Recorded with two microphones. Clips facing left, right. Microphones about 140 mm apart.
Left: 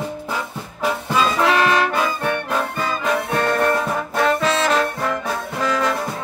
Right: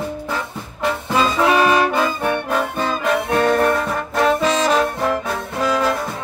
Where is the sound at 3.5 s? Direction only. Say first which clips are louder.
Right 2 dB; 5° right (ahead or behind).